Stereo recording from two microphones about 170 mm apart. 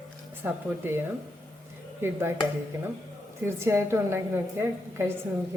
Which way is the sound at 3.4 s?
15° right (ahead or behind).